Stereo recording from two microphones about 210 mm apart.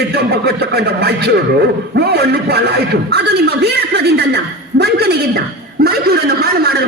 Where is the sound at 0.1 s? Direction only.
50° right (ahead or behind).